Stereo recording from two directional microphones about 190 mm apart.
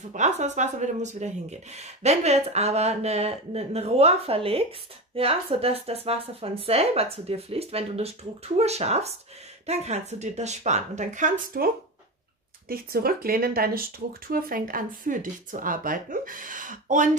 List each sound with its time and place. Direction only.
0.1 s speech: 40° right (ahead or behind)